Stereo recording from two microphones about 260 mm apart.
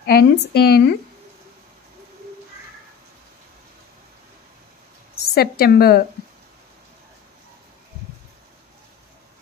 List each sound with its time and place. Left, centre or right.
0.0 s speech: left
5.2 s a woman's voice: left